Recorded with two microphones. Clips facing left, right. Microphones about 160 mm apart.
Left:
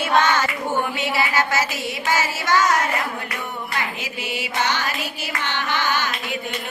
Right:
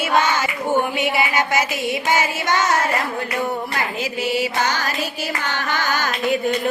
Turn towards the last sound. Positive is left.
turn(degrees=-45)  # may be behind; listen again after turning